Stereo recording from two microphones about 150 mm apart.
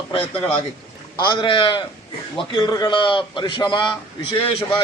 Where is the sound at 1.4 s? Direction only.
35° left (ahead or behind).